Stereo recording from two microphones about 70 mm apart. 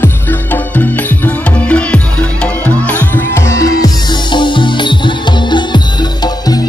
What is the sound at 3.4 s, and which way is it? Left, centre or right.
Music, left.